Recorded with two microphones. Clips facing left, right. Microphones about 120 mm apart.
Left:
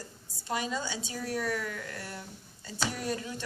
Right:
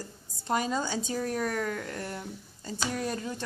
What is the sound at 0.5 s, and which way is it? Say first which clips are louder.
A woman's voice: right 4 dB; 40° right (ahead or behind).